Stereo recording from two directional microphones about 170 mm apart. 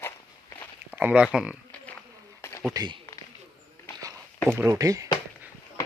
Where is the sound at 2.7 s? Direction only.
25° right (ahead or behind).